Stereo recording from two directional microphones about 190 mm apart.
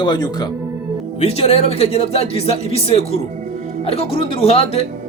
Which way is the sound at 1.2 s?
35° left (ahead or behind).